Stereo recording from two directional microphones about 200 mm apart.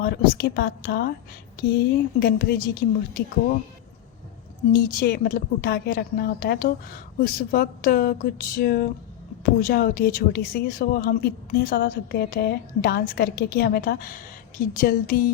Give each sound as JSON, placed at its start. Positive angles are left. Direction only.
{"t": 0.0, "sound": "speech", "side_deg": 50}
{"t": 2.1, "sound": "speech", "side_deg": 50}
{"t": 4.7, "sound": "speech", "side_deg": 50}